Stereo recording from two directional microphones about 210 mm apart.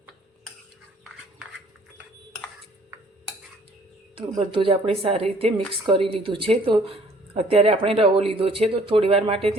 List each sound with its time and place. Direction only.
4.1 s a woman's voice: 25° right (ahead or behind)